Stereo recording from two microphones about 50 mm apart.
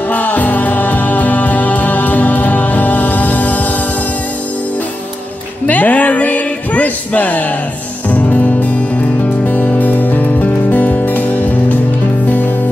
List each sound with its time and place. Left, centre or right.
0.1 s music: left
5.7 s a sound: left
8.1 s music: left